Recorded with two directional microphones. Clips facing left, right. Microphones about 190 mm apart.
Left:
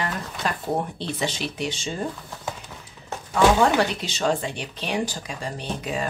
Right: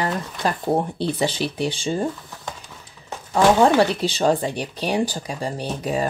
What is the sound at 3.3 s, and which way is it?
Speech, 35° right (ahead or behind).